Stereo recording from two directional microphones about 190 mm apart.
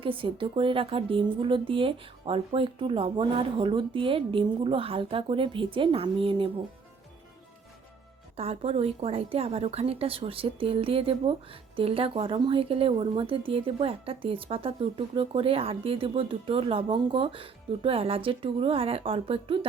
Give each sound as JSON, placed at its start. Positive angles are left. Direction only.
{"t": 0.0, "sound": "speech", "side_deg": -30}
{"t": 8.4, "sound": "a woman's voice", "side_deg": -30}